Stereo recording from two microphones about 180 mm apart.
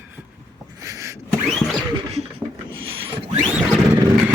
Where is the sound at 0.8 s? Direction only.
15° right (ahead or behind).